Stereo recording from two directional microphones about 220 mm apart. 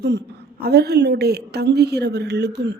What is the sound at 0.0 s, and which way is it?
Speech, 50° right (ahead or behind).